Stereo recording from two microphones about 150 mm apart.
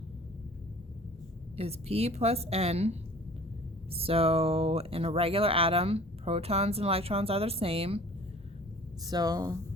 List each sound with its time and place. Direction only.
1.5 s a woman's voice: 40° right (ahead or behind)
9.0 s speech: 25° right (ahead or behind)